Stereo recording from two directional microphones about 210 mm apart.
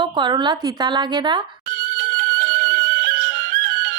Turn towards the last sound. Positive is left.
turn(degrees=-45)  # may be behind; listen again after turning